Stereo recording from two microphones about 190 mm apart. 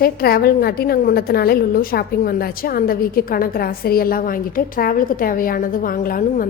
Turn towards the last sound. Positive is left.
turn(degrees=45)  # may be behind; listen again after turning